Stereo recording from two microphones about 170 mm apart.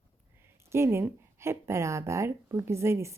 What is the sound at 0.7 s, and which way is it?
Speech, 15° right (ahead or behind).